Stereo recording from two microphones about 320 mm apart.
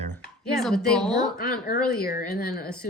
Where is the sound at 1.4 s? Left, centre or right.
Left.